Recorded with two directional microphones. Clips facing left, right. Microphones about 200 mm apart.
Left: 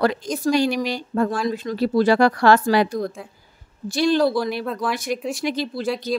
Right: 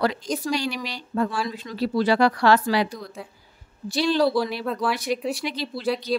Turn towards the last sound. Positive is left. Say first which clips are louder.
# left 1 dB
turn(degrees=45)  # may be behind; listen again after turning